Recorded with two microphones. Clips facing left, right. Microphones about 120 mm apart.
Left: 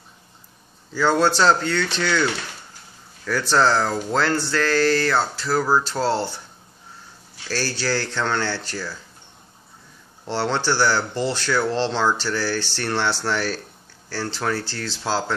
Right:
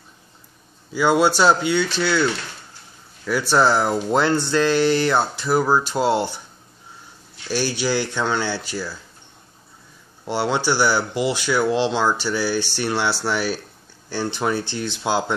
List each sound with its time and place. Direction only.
0.9 s speech: 10° right (ahead or behind)
3.3 s speech: 10° right (ahead or behind)
7.4 s speech: 15° right (ahead or behind)
10.2 s speech: 10° right (ahead or behind)